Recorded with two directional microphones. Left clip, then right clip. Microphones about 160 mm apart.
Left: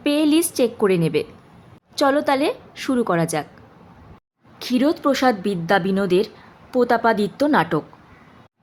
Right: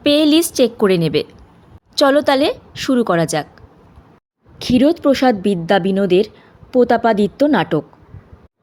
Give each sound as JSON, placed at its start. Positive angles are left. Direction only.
{"t": 0.0, "sound": "a woman's voice", "side_deg": -25}
{"t": 4.6, "sound": "a woman's voice", "side_deg": -25}